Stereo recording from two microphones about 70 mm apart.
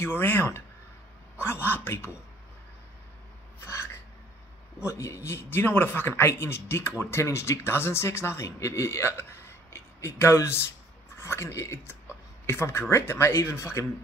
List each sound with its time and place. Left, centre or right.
0.0 s speech: left
3.6 s a sound: left
4.7 s speech: left